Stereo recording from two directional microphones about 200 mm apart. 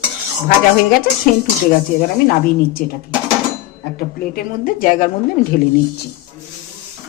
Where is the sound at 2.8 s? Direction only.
50° left (ahead or behind).